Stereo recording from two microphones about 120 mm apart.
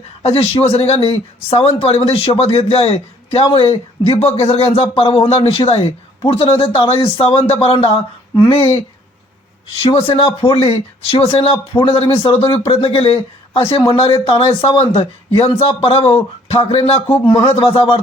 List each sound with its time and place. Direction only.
0.2 s a man's voice: 60° left (ahead or behind)
9.9 s a man's voice: 50° left (ahead or behind)
11.5 s a man's voice: 35° left (ahead or behind)
12.5 s a man's voice: 50° left (ahead or behind)
17.2 s a man's voice: 45° left (ahead or behind)